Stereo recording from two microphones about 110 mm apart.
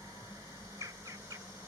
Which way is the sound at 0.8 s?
30° right (ahead or behind).